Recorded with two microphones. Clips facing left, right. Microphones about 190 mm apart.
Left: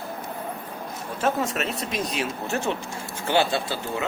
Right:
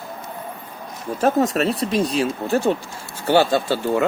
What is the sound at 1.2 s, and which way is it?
Speech, 40° right (ahead or behind).